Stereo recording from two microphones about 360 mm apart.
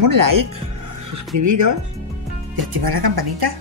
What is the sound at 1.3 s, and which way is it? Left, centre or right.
Speech, right.